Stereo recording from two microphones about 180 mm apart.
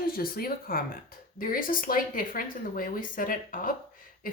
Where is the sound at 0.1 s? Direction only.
55° left (ahead or behind).